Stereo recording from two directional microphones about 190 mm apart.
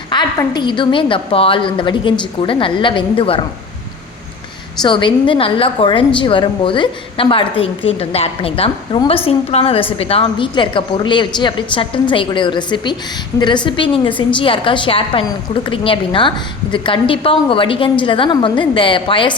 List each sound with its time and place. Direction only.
0.1 s a woman's voice: 25° left (ahead or behind)
4.8 s a woman's voice: 25° left (ahead or behind)